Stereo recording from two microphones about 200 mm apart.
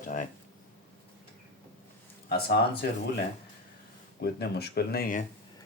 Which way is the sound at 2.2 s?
55° left (ahead or behind).